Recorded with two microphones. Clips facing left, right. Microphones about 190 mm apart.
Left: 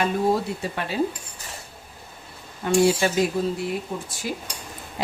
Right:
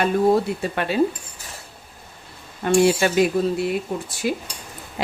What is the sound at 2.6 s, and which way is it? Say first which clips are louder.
Speech: right 2 dB; 70° right (ahead or behind).